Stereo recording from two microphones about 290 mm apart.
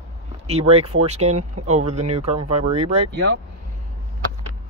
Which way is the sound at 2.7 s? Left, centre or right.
Right.